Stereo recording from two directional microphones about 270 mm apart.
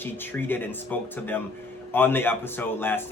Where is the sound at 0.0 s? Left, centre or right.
Centre.